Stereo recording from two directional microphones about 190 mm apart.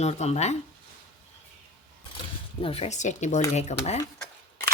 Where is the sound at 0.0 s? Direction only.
35° left (ahead or behind).